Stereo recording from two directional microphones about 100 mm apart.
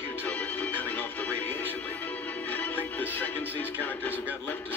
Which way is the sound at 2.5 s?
15° left (ahead or behind).